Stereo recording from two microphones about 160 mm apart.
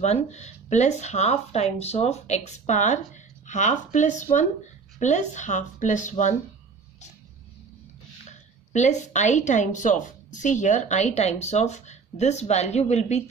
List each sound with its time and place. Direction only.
0.0 s a woman's voice: 45° left (ahead or behind)
8.3 s a woman's voice: 45° left (ahead or behind)